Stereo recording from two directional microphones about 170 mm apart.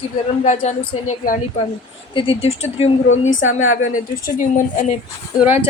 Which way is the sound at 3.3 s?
50° left (ahead or behind).